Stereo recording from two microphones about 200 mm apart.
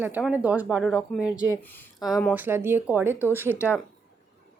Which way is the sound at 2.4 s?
10° right (ahead or behind).